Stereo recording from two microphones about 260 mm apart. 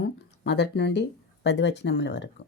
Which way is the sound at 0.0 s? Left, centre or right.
Left.